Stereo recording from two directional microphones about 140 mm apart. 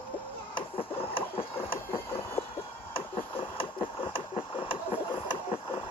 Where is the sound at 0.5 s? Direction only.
40° left (ahead or behind).